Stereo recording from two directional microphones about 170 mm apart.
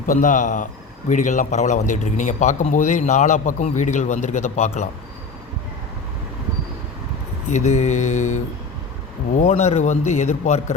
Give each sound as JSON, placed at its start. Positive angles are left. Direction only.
{"t": 0.0, "sound": "a man's voice", "side_deg": 50}
{"t": 7.5, "sound": "a man's voice", "side_deg": 45}